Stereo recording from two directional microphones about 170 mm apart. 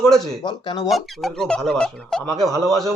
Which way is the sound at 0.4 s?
30° left (ahead or behind).